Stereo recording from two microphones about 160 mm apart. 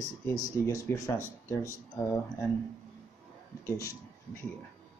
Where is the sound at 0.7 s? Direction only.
20° left (ahead or behind).